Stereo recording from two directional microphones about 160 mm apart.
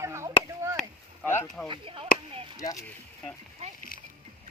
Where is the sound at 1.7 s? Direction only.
35° right (ahead or behind).